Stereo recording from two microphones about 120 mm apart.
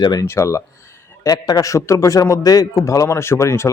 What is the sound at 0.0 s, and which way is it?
Speech, 35° left (ahead or behind).